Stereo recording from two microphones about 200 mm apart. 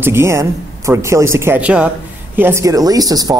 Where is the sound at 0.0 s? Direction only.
15° right (ahead or behind).